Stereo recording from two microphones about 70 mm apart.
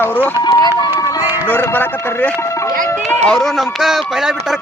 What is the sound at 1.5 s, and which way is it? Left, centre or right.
Speech, left.